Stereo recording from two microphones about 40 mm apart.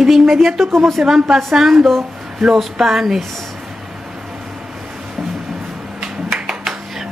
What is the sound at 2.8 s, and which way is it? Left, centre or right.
Speech, centre.